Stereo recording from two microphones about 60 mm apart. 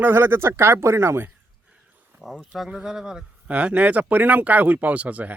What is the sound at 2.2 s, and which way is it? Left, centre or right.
Speech, centre.